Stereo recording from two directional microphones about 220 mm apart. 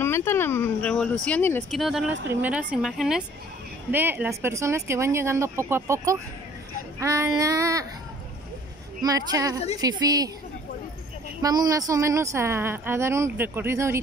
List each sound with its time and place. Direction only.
0.0 s speech: 10° left (ahead or behind); by 7.8 s 15° right (ahead or behind)
9.0 s speech: 15° right (ahead or behind)
11.4 s speech: 15° right (ahead or behind)